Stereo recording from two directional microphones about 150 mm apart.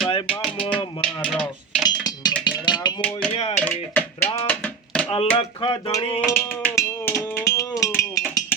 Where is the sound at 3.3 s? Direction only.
45° left (ahead or behind).